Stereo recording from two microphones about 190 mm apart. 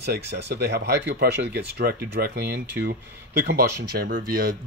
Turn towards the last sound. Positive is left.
turn(degrees=-50)  # may be behind; listen again after turning